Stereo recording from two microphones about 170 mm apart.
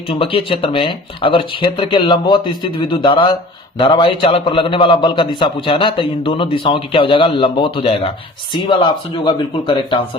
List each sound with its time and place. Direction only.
0.1 s a man's voice: 30° left (ahead or behind)